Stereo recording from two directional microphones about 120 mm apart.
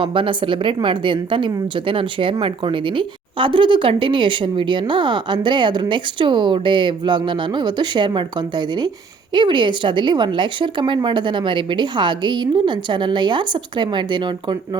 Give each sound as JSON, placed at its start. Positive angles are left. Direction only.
{"t": 0.0, "sound": "a woman's voice", "side_deg": -45}